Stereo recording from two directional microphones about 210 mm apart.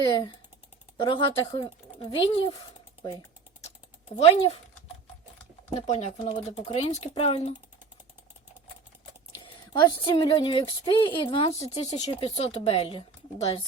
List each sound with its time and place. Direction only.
0.1 s a woman's voice: 20° left (ahead or behind)
4.2 s a woman's voice: 30° left (ahead or behind)
5.8 s a woman's voice: 35° left (ahead or behind)
9.7 s a woman's voice: 20° left (ahead or behind)